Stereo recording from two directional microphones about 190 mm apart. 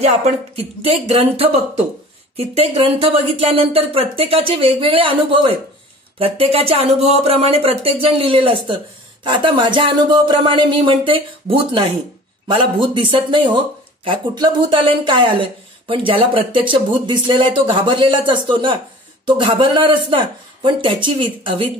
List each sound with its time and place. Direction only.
0.6 s speech: 35° right (ahead or behind)